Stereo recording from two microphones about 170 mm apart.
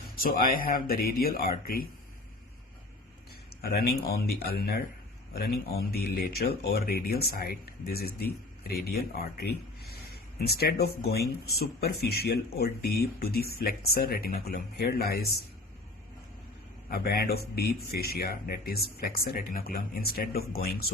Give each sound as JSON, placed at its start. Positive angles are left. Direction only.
{"t": 0.2, "sound": "speech", "side_deg": 60}
{"t": 3.6, "sound": "speech", "side_deg": 65}
{"t": 16.9, "sound": "speech", "side_deg": 65}